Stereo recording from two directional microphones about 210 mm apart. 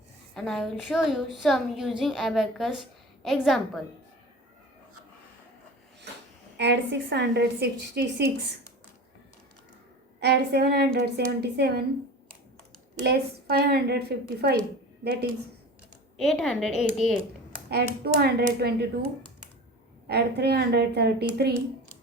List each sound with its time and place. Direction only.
0.3 s a woman's voice: centre (ahead or behind)
6.6 s a woman's voice: 55° right (ahead or behind)
10.2 s a woman's voice: 50° right (ahead or behind)
13.0 s a woman's voice: 50° right (ahead or behind)
16.1 s a woman's voice: centre (ahead or behind)
17.7 s a woman's voice: 50° right (ahead or behind)
20.1 s a woman's voice: 50° right (ahead or behind)